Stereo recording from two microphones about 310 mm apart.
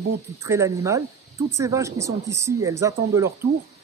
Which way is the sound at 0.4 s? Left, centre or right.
Centre.